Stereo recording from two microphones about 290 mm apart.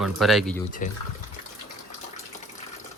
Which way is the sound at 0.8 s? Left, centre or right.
Left.